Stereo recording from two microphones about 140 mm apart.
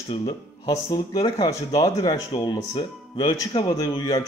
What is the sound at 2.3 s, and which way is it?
A man's voice, 40° left (ahead or behind).